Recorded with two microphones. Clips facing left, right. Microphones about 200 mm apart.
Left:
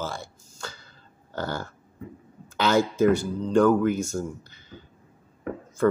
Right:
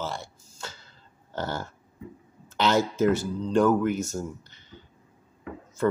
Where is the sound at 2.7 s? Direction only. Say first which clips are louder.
Left 3 dB; 5° right (ahead or behind).